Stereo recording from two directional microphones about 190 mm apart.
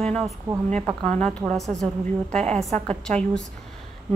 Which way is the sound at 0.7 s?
30° right (ahead or behind).